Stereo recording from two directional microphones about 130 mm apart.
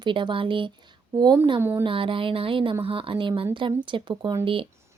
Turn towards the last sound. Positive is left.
turn(degrees=-40)  # may be behind; listen again after turning